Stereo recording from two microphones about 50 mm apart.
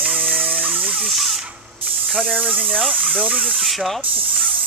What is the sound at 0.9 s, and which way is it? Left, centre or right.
Spray, centre.